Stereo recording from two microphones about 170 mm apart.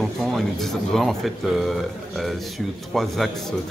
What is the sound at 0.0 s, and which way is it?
Speech, centre (ahead or behind).